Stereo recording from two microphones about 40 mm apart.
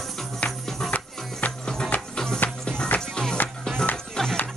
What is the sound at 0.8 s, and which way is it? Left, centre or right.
Music, centre.